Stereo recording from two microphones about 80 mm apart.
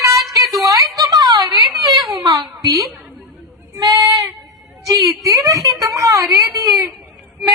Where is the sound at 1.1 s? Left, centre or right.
Right.